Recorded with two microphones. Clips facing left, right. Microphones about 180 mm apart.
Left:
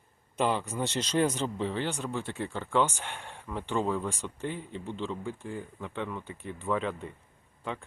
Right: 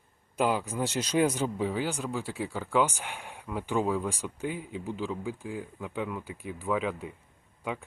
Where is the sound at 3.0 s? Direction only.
15° right (ahead or behind).